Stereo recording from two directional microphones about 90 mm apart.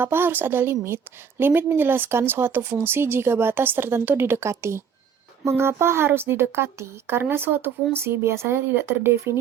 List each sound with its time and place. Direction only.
0.0 s a woman's voice: 25° right (ahead or behind)